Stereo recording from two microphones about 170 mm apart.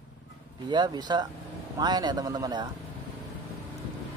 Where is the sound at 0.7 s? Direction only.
25° right (ahead or behind).